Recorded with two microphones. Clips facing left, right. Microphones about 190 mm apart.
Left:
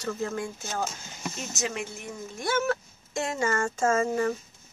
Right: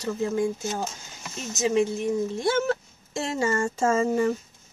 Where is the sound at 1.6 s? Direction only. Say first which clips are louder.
Right 12 dB; 20° right (ahead or behind).